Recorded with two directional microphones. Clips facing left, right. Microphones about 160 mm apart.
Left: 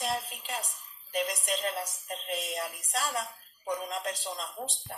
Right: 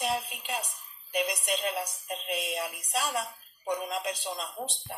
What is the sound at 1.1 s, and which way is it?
A woman's voice, 15° right (ahead or behind).